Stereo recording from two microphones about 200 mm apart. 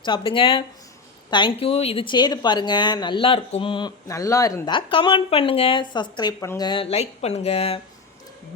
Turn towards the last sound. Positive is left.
turn(degrees=30)  # may be behind; listen again after turning